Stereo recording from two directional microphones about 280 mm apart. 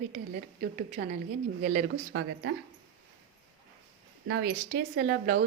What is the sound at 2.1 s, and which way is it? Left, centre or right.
Speech, right.